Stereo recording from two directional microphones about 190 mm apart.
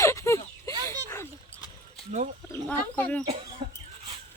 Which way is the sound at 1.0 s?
15° left (ahead or behind).